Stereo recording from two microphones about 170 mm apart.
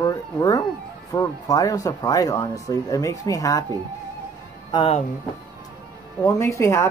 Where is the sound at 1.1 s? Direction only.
20° left (ahead or behind).